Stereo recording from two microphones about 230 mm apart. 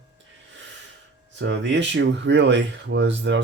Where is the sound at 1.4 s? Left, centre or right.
Right.